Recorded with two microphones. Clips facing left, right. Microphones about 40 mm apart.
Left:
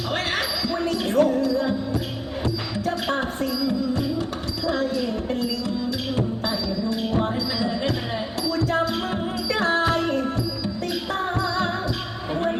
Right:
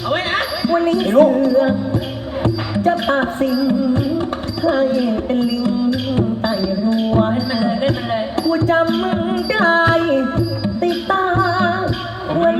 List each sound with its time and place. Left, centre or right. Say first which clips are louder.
0.1 s speech: right 7 dB; right
2.4 s music: right 9 dB; right